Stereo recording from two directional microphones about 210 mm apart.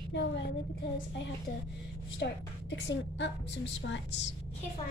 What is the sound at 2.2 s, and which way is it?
A woman's voice, 50° left (ahead or behind).